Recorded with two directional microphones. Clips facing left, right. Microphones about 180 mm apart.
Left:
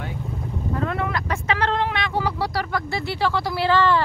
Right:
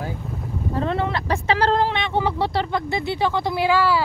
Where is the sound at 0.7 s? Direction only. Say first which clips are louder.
Right 3 dB; 30° right (ahead or behind).